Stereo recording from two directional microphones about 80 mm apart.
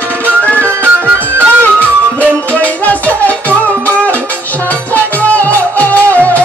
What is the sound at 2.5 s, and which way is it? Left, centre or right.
Music, centre.